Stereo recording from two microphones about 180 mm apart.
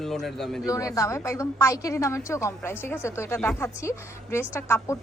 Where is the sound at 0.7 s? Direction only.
20° left (ahead or behind).